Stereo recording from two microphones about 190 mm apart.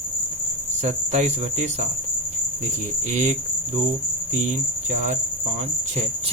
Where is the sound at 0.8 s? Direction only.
35° right (ahead or behind).